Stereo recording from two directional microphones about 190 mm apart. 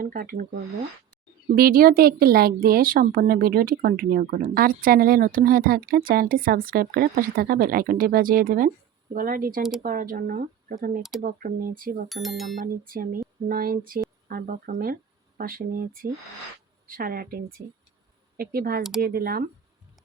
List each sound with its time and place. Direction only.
0.0 s speech: 50° right (ahead or behind)
1.5 s speech: 50° right (ahead or behind)
12.0 s speech: centre (ahead or behind)
12.8 s speech: 50° right (ahead or behind)
18.8 s speech: centre (ahead or behind)
19.0 s speech: 50° right (ahead or behind)